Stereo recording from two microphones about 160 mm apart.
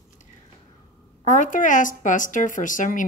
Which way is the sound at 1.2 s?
55° left (ahead or behind).